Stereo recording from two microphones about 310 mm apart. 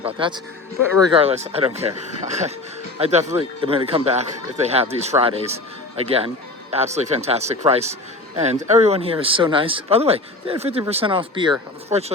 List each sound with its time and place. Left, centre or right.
0.0 s a man's voice: centre